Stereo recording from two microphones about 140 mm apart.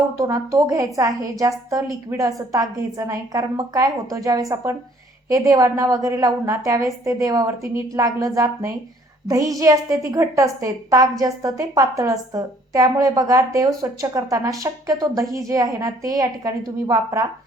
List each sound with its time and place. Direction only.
0.2 s a woman's voice: 20° right (ahead or behind)